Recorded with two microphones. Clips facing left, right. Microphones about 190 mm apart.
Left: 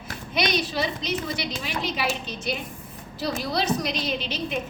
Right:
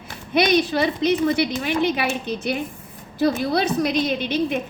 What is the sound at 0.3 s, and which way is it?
A woman's voice, 60° right (ahead or behind).